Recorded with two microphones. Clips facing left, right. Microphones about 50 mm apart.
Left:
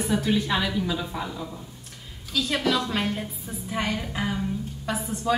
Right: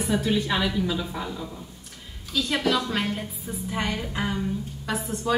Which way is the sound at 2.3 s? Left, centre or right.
Centre.